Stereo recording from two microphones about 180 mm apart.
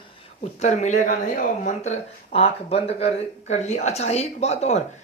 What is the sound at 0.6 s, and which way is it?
Speech, 40° left (ahead or behind).